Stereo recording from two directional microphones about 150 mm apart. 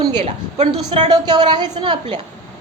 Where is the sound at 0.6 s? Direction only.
50° right (ahead or behind).